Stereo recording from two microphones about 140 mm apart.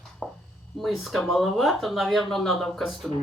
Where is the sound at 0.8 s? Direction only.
Centre (ahead or behind).